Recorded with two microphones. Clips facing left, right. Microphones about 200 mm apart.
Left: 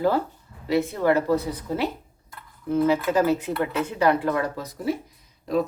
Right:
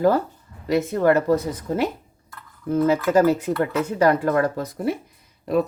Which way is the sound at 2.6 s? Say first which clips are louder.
Right 2 dB; 40° right (ahead or behind).